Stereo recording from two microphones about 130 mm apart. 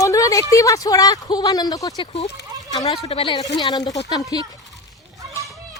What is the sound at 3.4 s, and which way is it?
A woman's voice, 30° left (ahead or behind).